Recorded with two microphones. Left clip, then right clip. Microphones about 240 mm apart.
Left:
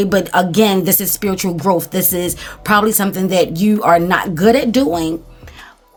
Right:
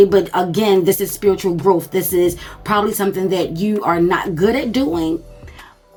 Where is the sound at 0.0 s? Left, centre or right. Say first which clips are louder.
Right 2 dB; left.